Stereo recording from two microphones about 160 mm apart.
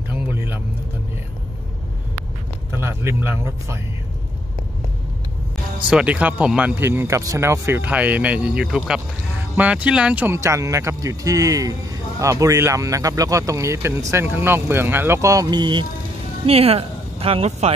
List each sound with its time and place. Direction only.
0.1 s vehicle: 10° right (ahead or behind)
2.7 s speech: 15° right (ahead or behind)
5.9 s speech: 5° right (ahead or behind); by 17.7 s 40° right (ahead or behind)